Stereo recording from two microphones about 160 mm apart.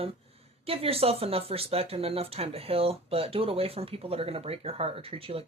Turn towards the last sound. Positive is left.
turn(degrees=-35)  # may be behind; listen again after turning